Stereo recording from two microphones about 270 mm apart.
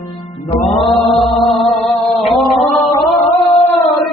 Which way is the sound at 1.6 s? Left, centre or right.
Centre.